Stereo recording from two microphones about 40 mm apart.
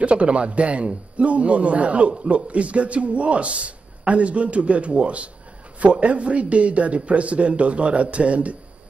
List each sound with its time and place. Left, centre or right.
0.0 s a man's voice: right